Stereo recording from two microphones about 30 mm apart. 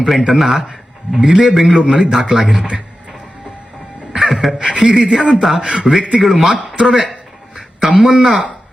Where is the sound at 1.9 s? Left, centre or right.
Right.